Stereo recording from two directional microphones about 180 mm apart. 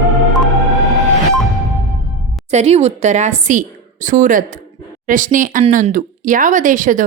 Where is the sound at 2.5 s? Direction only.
35° right (ahead or behind).